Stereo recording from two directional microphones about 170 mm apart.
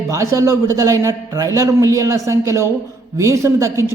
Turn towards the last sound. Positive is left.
turn(degrees=-15)  # may be behind; listen again after turning